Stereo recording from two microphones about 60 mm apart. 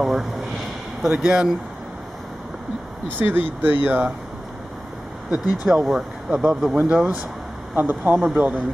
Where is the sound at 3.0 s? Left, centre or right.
Right.